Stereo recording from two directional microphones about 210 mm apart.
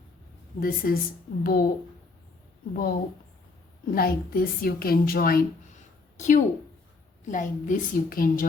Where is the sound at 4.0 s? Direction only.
45° left (ahead or behind).